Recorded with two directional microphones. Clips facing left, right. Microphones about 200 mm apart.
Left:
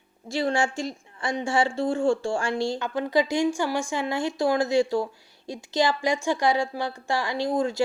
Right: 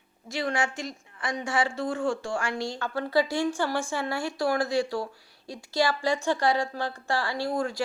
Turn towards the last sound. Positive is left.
turn(degrees=20)  # may be behind; listen again after turning